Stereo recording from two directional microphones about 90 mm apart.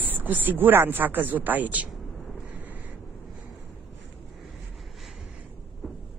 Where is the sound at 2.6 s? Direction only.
20° right (ahead or behind).